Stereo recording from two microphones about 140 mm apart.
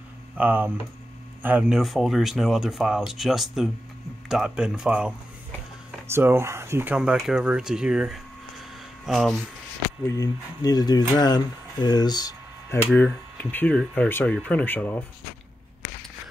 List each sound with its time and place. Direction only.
0.4 s speech: 10° right (ahead or behind)
6.0 s speech: 15° right (ahead or behind); by 9.4 s centre (ahead or behind)
10.0 s speech: 25° left (ahead or behind)
12.7 s speech: 10° left (ahead or behind)